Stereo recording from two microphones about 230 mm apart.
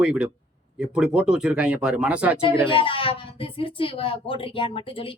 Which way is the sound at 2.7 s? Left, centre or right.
Left.